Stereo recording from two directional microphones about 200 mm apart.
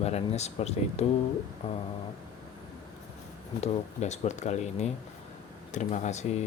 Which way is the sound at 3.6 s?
35° left (ahead or behind).